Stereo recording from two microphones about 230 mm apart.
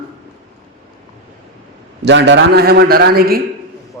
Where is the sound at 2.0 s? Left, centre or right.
Right.